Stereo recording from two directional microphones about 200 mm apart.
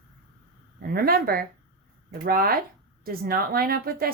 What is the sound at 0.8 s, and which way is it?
Speech, 50° right (ahead or behind).